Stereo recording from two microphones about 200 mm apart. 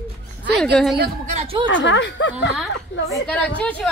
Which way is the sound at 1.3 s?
30° right (ahead or behind).